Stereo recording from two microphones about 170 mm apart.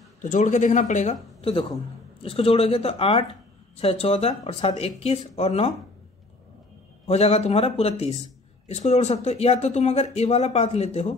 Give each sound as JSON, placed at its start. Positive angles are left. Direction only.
{"t": 0.2, "sound": "speech", "side_deg": 45}
{"t": 7.1, "sound": "speech", "side_deg": 40}